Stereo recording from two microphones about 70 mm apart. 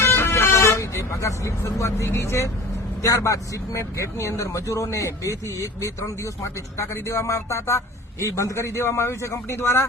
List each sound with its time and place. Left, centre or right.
0.0 s vehicle: left
2.0 s a man's voice: left